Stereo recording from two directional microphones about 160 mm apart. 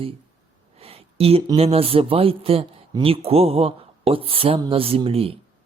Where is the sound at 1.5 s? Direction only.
40° right (ahead or behind).